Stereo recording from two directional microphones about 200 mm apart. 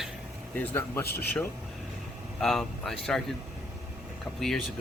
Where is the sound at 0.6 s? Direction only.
10° left (ahead or behind).